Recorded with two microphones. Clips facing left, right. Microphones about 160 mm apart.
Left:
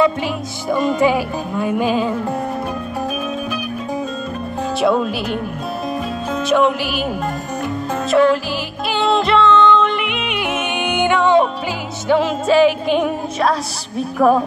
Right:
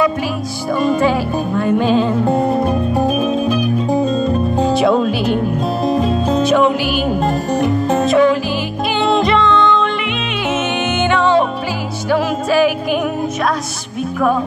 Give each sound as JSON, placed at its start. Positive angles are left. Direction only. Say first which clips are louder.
{"t": 0.7, "sound": "music", "louder": "right 1 dB", "side_deg": 20}
{"t": 2.2, "sound": "music", "louder": "right 7 dB", "side_deg": -25}
{"t": 4.7, "sound": "music", "louder": "even", "side_deg": 0}
{"t": 5.9, "sound": "music", "louder": "right 8 dB", "side_deg": -25}
{"t": 6.4, "sound": "music", "louder": "left 1 dB", "side_deg": 0}
{"t": 7.2, "sound": "music", "louder": "right 7 dB", "side_deg": -30}
{"t": 8.1, "sound": "music", "louder": "left 1 dB", "side_deg": 0}